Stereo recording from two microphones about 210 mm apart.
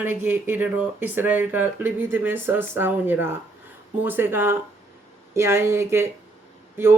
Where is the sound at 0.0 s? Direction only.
10° right (ahead or behind).